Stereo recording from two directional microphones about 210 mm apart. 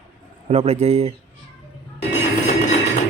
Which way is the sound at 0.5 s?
30° right (ahead or behind).